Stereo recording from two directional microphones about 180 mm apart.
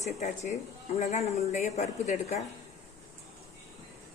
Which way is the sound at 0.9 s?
35° left (ahead or behind).